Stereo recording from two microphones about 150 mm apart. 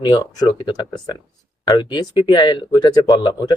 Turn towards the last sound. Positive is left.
turn(degrees=30)  # may be behind; listen again after turning